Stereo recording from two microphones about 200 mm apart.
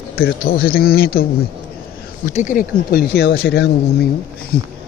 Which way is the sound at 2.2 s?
40° left (ahead or behind).